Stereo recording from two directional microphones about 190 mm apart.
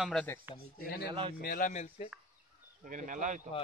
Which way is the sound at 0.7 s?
55° left (ahead or behind).